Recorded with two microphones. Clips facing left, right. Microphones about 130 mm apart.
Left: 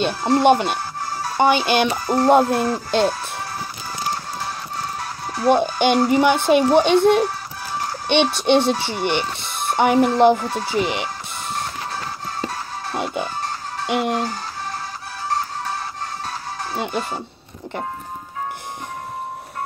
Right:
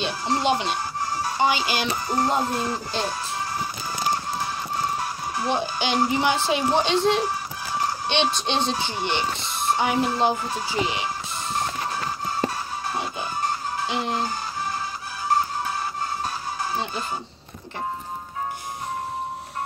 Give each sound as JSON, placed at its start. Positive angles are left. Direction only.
{"t": 0.0, "sound": "a child's voice", "side_deg": 55}
{"t": 5.4, "sound": "a child's voice", "side_deg": 55}
{"t": 12.9, "sound": "music", "side_deg": 65}
{"t": 13.8, "sound": "a child's voice", "side_deg": 65}
{"t": 16.7, "sound": "speech", "side_deg": 70}